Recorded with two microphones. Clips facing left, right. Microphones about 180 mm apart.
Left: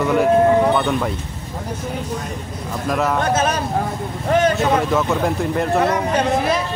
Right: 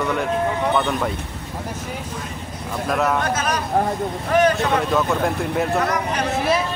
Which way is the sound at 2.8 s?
Centre (ahead or behind).